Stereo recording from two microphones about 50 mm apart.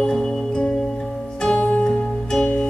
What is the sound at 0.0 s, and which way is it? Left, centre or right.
Music, centre.